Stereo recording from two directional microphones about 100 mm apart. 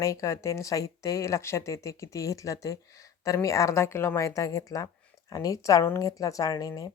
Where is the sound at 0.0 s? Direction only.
30° left (ahead or behind).